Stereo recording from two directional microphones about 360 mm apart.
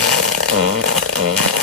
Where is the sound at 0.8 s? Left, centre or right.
Right.